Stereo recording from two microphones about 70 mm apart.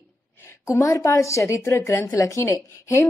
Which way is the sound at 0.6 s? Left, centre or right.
Left.